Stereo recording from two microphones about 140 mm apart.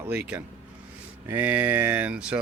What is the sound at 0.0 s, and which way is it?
Speech, 10° right (ahead or behind).